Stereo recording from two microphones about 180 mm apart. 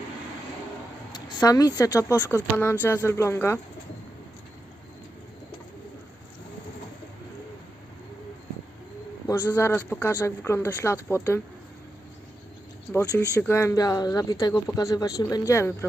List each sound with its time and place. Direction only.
1.1 s speech: 20° left (ahead or behind)
9.2 s speech: 15° left (ahead or behind)
12.9 s speech: 5° left (ahead or behind)
13.3 s speech: 15° left (ahead or behind)